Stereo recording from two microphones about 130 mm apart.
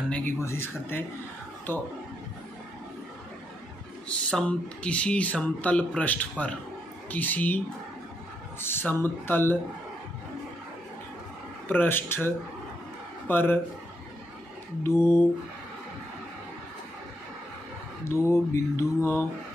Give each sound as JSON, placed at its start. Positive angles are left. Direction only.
{"t": 0.1, "sound": "speech", "side_deg": 20}
{"t": 4.1, "sound": "speech", "side_deg": 10}
{"t": 11.6, "sound": "speech", "side_deg": 15}
{"t": 14.8, "sound": "mantra", "side_deg": 20}
{"t": 18.0, "sound": "mantra", "side_deg": 20}